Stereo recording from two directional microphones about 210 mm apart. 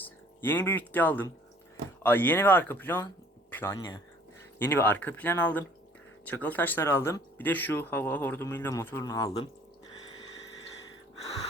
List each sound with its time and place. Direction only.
0.0 s speech: 10° left (ahead or behind)
3.5 s a sound: 10° left (ahead or behind)
3.8 s speech: 20° left (ahead or behind)
4.5 s speech: 10° left (ahead or behind)